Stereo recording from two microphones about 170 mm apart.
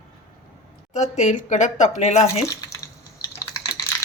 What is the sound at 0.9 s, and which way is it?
A woman's voice, 45° left (ahead or behind).